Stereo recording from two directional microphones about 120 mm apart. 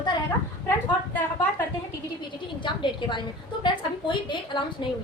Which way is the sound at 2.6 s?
40° left (ahead or behind).